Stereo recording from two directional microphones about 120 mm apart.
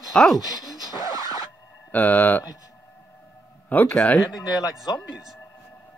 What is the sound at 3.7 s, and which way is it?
Speech, 15° left (ahead or behind).